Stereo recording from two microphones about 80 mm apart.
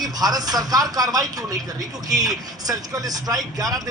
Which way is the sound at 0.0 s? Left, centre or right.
Right.